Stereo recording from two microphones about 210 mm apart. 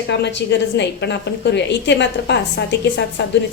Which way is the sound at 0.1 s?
55° left (ahead or behind).